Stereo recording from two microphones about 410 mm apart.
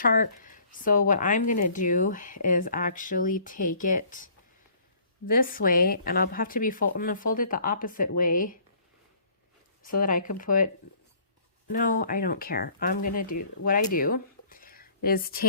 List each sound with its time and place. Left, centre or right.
0.0 s a woman's voice: centre
5.3 s a woman's voice: left
9.8 s a woman's voice: centre
11.7 s a woman's voice: centre
13.3 s speech: left
13.9 s a sound: left